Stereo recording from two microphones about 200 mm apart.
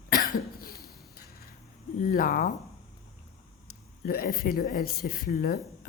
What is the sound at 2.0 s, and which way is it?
Speech, 45° left (ahead or behind).